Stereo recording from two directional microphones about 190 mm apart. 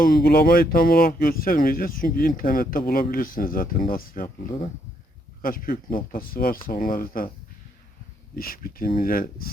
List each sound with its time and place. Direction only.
0.0 s speech: 50° left (ahead or behind)
5.4 s speech: 50° left (ahead or behind)
8.4 s speech: 50° left (ahead or behind)